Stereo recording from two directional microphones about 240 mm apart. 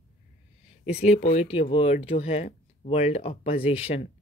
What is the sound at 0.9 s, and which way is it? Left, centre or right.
A man's voice, left.